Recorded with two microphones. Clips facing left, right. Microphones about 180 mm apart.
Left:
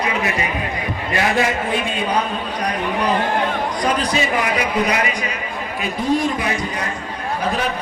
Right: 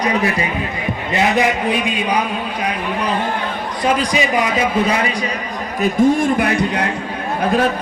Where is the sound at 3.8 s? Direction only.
10° right (ahead or behind).